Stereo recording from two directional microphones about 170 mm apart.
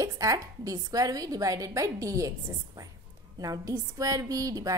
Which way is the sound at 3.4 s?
20° right (ahead or behind).